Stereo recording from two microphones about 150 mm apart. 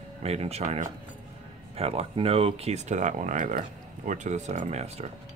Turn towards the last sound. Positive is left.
turn(degrees=-45)  # may be behind; listen again after turning